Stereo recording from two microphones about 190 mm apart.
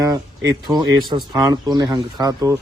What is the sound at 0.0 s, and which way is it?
Speech, 20° right (ahead or behind).